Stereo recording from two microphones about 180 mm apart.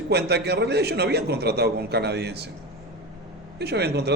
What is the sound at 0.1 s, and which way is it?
A man's voice, 65° right (ahead or behind).